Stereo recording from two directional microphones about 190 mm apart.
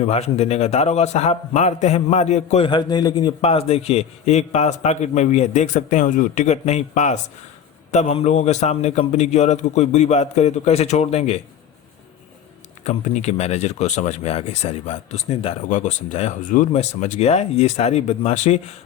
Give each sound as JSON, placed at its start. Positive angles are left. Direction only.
{"t": 0.0, "sound": "a man's voice", "side_deg": 35}
{"t": 2.6, "sound": "a man's voice", "side_deg": 25}
{"t": 12.8, "sound": "a man's voice", "side_deg": 35}